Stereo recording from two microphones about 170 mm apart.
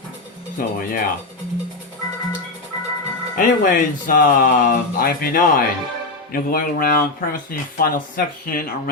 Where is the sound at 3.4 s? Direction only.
55° left (ahead or behind).